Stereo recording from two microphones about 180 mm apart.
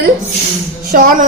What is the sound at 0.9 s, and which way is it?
Speech, 55° right (ahead or behind).